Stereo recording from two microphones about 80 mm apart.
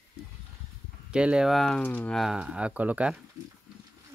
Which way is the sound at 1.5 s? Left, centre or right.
Centre.